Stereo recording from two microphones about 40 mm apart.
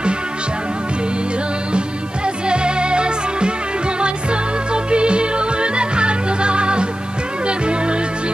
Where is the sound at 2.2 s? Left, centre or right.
Right.